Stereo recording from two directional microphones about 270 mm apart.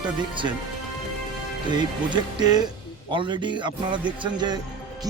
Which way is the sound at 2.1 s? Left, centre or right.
Centre.